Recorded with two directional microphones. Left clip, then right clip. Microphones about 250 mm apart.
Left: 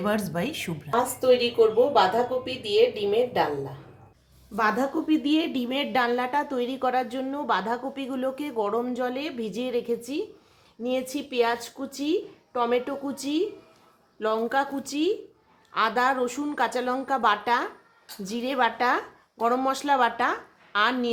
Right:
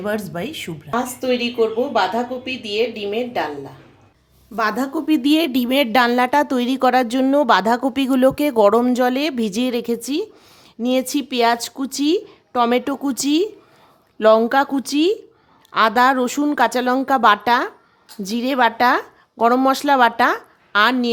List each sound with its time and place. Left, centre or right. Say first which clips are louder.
0.0 s speech: right 3 dB; right
1.2 s a woman's voice: even; centre
4.5 s a woman's voice: right 4 dB; right